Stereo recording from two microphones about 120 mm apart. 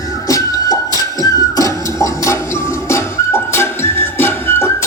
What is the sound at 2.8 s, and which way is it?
Music, 20° left (ahead or behind).